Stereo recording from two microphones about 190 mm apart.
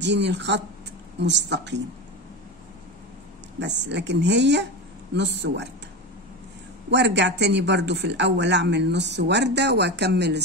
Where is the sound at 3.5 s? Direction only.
65° right (ahead or behind).